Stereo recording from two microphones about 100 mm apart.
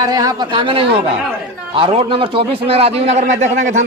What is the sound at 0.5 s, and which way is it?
A man's voice, 65° right (ahead or behind).